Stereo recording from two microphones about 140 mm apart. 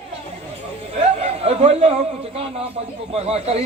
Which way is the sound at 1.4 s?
45° right (ahead or behind).